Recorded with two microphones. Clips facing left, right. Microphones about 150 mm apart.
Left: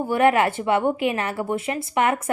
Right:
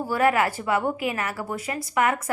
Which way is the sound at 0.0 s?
25° left (ahead or behind).